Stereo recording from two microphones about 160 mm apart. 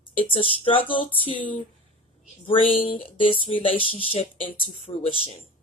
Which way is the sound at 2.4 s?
35° left (ahead or behind).